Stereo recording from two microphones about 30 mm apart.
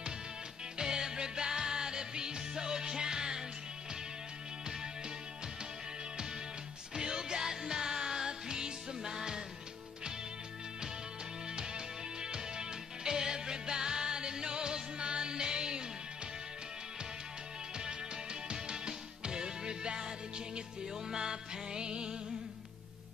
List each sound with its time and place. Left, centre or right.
0.7 s music: centre
7.0 s music: right
11.5 s music: right
17.7 s music: right